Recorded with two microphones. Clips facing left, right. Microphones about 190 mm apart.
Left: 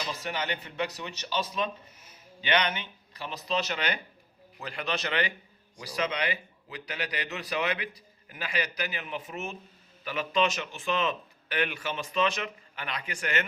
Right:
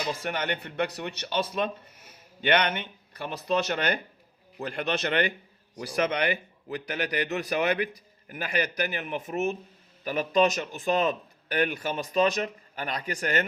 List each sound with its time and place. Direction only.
0.1 s a man's voice: 55° right (ahead or behind)